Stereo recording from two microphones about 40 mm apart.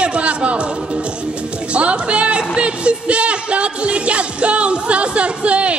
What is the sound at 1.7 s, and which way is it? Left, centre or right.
Speech, right.